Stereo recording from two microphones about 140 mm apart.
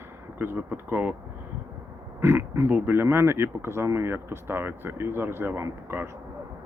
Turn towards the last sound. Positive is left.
turn(degrees=-20)  # may be behind; listen again after turning